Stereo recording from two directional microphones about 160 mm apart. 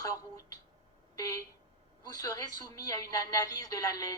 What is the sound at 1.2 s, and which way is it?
A woman's voice, 20° left (ahead or behind).